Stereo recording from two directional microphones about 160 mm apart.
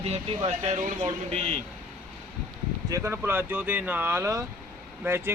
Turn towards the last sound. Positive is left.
turn(degrees=-15)  # may be behind; listen again after turning